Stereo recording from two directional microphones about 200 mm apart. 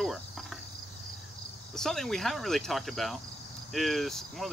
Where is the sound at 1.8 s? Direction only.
Centre (ahead or behind).